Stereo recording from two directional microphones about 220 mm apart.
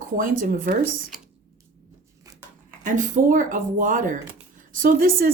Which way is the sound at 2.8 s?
35° right (ahead or behind).